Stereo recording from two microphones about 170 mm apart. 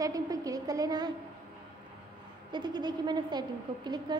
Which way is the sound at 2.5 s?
25° right (ahead or behind).